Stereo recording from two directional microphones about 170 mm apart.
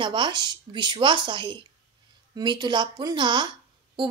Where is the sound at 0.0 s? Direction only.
30° right (ahead or behind).